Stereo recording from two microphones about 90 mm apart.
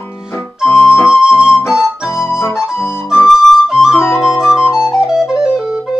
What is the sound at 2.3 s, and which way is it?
Flute, 30° left (ahead or behind).